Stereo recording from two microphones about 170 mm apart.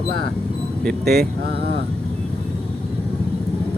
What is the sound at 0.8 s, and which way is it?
Speech, 65° right (ahead or behind).